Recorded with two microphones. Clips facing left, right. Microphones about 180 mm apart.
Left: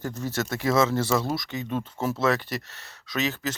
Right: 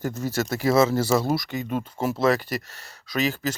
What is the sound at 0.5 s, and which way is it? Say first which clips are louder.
Speech: right 3 dB; 5° right (ahead or behind).